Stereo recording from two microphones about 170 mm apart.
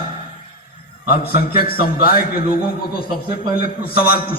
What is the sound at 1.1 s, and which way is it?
A man's voice, 65° left (ahead or behind).